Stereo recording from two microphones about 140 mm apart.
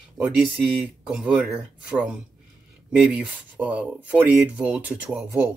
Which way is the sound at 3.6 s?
10° right (ahead or behind).